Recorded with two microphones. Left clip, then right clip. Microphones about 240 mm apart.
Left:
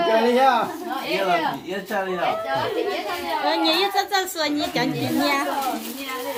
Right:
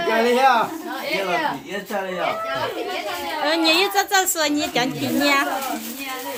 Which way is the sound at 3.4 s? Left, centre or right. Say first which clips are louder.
Right 3 dB; right.